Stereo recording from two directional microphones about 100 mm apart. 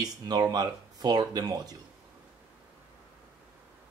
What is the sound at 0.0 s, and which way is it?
Speech, 40° right (ahead or behind).